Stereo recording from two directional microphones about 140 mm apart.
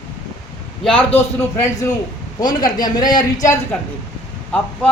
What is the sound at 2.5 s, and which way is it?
Speech, 80° left.